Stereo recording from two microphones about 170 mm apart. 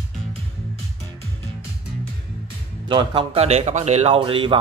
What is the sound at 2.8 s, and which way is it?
Speech, 30° right (ahead or behind).